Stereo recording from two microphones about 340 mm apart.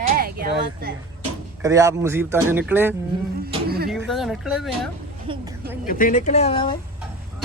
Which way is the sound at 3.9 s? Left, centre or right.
Centre.